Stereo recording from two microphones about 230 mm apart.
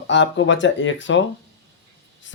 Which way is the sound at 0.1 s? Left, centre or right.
Left.